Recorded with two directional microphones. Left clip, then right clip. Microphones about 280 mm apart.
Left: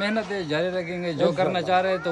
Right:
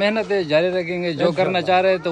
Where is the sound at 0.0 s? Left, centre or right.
Centre.